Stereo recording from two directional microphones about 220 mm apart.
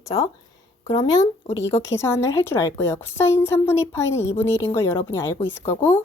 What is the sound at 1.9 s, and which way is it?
A woman's voice, 10° left (ahead or behind).